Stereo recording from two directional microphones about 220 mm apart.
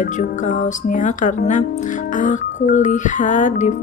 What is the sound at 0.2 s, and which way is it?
Music, 35° left (ahead or behind).